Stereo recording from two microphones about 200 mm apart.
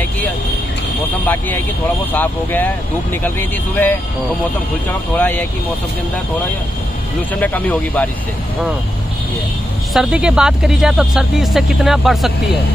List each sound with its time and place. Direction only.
1.2 s speech: 10° left (ahead or behind)
5.1 s speech: 10° left (ahead or behind)
7.3 s speech: 10° left (ahead or behind)
9.9 s speech: 5° right (ahead or behind)